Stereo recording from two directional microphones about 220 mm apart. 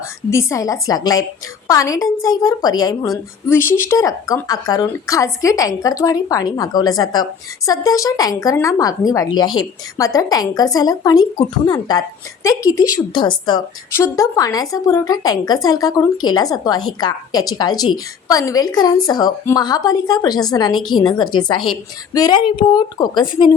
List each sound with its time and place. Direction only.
0.3 s a woman's voice: 15° left (ahead or behind)